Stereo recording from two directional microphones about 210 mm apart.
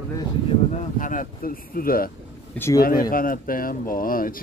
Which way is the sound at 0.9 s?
40° left (ahead or behind).